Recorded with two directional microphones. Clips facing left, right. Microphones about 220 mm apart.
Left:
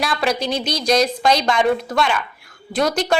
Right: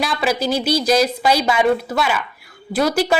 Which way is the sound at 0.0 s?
Centre (ahead or behind).